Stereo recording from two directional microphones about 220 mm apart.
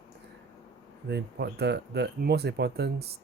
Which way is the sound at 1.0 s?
50° right (ahead or behind).